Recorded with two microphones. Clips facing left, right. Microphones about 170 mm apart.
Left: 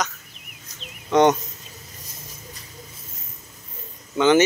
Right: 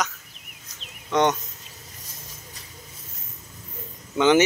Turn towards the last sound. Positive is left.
turn(degrees=-15)  # may be behind; listen again after turning